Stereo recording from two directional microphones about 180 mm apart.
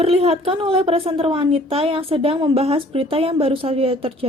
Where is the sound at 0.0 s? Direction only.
30° right (ahead or behind).